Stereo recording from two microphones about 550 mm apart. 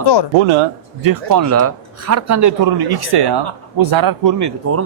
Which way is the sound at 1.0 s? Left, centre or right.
Right.